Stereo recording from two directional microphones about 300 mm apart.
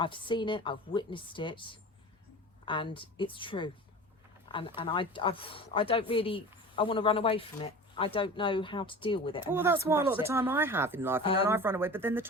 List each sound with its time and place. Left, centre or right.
0.0 s speech: centre
9.4 s speech: centre
11.2 s speech: centre
11.4 s speech: centre